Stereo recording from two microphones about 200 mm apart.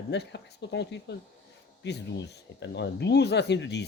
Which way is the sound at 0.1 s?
55° left (ahead or behind).